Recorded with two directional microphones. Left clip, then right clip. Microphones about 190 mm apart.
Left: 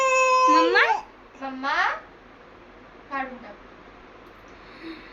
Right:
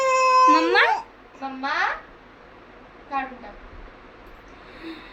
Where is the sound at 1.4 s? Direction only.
35° left (ahead or behind).